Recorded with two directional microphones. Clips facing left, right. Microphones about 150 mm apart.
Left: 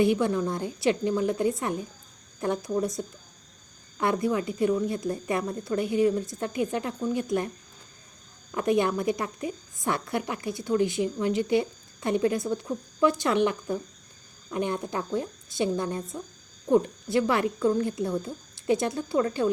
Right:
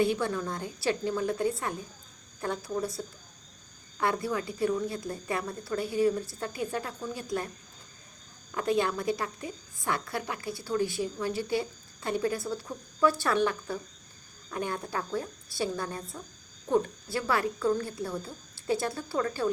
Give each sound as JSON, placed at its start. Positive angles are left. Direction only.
{"t": 0.0, "sound": "a woman's voice", "side_deg": 20}
{"t": 8.5, "sound": "a woman's voice", "side_deg": 20}